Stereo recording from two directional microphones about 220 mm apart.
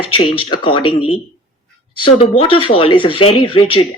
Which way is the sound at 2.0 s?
25° left (ahead or behind).